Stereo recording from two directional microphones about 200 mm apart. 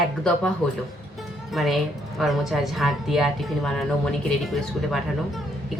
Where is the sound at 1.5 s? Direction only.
Centre (ahead or behind).